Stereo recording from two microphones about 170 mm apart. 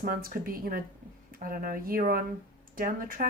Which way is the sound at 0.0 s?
55° right (ahead or behind).